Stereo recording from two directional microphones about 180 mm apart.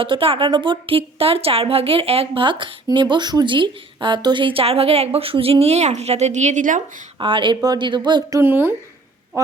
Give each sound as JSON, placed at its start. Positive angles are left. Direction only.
{"t": 0.0, "sound": "a woman's voice", "side_deg": -30}
{"t": 7.2, "sound": "speech", "side_deg": -25}
{"t": 8.4, "sound": "speech", "side_deg": -10}
{"t": 9.3, "sound": "a sound", "side_deg": -15}